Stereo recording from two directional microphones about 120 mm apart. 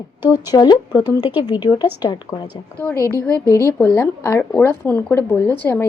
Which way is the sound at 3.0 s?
25° right (ahead or behind).